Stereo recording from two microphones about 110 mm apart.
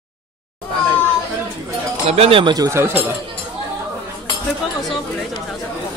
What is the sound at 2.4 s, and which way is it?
Speech, 35° right (ahead or behind).